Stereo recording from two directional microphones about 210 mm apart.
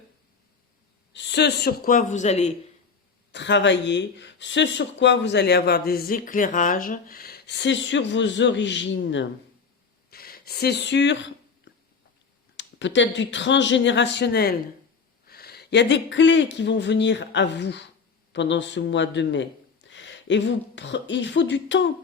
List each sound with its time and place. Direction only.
1.1 s speech: 55° left (ahead or behind); by 2.5 s 35° left (ahead or behind)
3.3 s speech: 55° left (ahead or behind)
10.1 s speech: 45° left (ahead or behind)
12.5 s speech: 60° left (ahead or behind)